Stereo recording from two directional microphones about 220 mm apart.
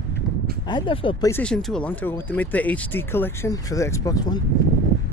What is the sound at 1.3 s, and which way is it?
Speech, 5° left (ahead or behind).